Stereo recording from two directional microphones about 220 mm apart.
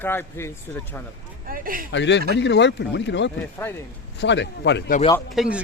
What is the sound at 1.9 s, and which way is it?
Speech, 55° left (ahead or behind).